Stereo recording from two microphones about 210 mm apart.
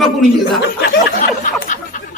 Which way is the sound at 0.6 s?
50° left (ahead or behind).